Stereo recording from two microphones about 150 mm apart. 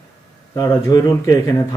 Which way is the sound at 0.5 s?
20° left (ahead or behind).